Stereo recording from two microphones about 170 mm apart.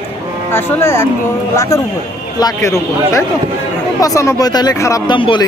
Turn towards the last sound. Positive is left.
turn(degrees=30)  # may be behind; listen again after turning